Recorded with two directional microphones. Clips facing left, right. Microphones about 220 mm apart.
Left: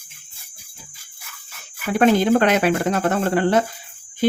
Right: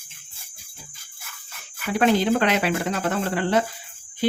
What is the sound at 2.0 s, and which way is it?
Speech, 50° left (ahead or behind).